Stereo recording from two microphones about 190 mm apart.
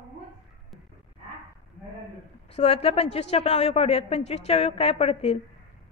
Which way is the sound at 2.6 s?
35° left (ahead or behind).